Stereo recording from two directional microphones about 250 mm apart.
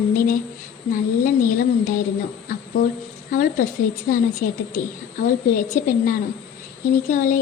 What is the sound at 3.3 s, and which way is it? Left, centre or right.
A woman's voice, left.